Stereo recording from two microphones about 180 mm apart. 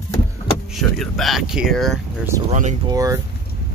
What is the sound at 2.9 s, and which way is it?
Speech, 20° right (ahead or behind).